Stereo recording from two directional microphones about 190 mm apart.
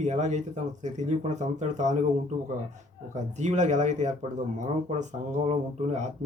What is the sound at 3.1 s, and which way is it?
Speech, 40° right (ahead or behind).